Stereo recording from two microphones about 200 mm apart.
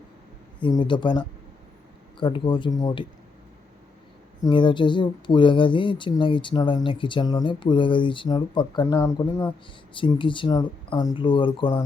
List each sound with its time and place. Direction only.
0.6 s speech: 25° left (ahead or behind)
4.4 s speech: 25° left (ahead or behind)
9.9 s speech: 25° left (ahead or behind)